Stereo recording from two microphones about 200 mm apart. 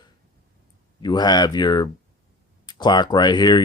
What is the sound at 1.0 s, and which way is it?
Speech, 20° left (ahead or behind).